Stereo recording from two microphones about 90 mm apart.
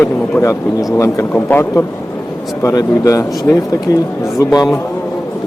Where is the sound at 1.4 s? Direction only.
20° left (ahead or behind).